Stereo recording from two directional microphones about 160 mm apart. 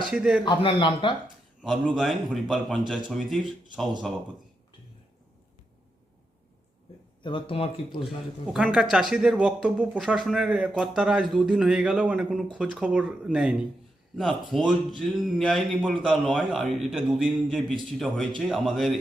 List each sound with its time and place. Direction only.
0.1 s speech: 5° right (ahead or behind)
0.4 s speech: 30° left (ahead or behind)
1.6 s speech: centre (ahead or behind)
7.2 s speech: 30° left (ahead or behind)
8.0 s speech: 5° right (ahead or behind)